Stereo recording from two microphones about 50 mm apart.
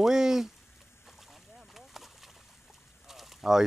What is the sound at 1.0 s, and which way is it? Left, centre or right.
Boat, centre.